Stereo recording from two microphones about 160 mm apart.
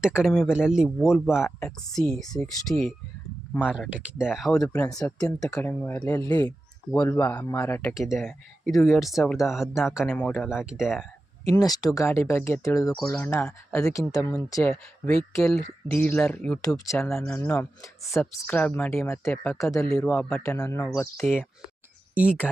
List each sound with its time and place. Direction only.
0.0 s speech: 5° right (ahead or behind)
1.4 s speech: 15° left (ahead or behind)
2.0 s speech: 5° left (ahead or behind)
3.6 s speech: 10° right (ahead or behind)
5.2 s speech: 20° left (ahead or behind)
8.6 s speech: centre (ahead or behind)
11.5 s speech: 25° left (ahead or behind)
13.1 s speech: 10° left (ahead or behind)
16.6 s speech: 20° left (ahead or behind)
16.9 s speech: 5° left (ahead or behind)
17.3 s speech: 15° left (ahead or behind)
19.9 s speech: 5° left (ahead or behind)
20.4 s speech: 20° left (ahead or behind)
22.1 s speech: 10° right (ahead or behind)